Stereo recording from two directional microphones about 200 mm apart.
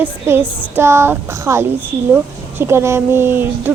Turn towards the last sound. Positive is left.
turn(degrees=-10)  # may be behind; listen again after turning